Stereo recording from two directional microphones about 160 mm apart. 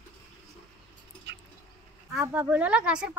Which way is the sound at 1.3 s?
90° right.